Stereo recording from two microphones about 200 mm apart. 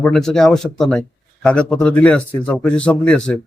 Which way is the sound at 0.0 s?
5° left (ahead or behind).